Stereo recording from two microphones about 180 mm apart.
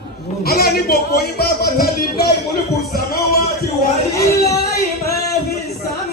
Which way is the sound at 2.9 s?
60° left (ahead or behind).